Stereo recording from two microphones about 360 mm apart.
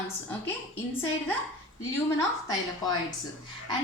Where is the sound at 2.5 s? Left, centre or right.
Centre.